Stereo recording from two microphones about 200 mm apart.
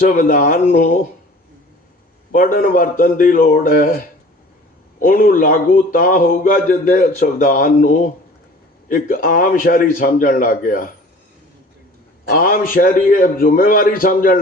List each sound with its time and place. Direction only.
0.1 s speech: 45° left (ahead or behind)
2.3 s speech: 45° left (ahead or behind)
4.9 s speech: 45° left (ahead or behind)
12.3 s speech: 45° left (ahead or behind)